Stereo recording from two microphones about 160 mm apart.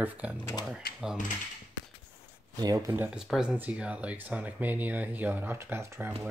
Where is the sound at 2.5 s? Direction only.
25° right (ahead or behind).